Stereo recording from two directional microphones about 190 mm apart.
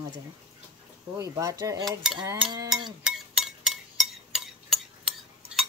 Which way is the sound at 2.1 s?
25° right (ahead or behind).